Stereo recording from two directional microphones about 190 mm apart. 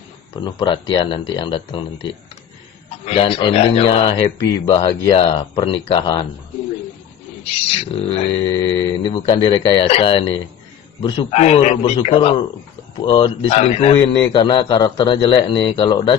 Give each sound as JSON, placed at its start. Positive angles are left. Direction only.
{"t": 0.3, "sound": "a man's voice", "side_deg": 25}
{"t": 7.7, "sound": "a man's voice", "side_deg": 30}